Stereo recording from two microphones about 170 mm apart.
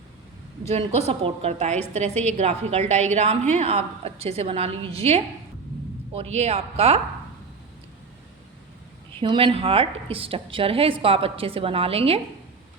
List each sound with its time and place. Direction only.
0.7 s a woman's voice: 40° right (ahead or behind)
9.2 s a woman's voice: 30° right (ahead or behind)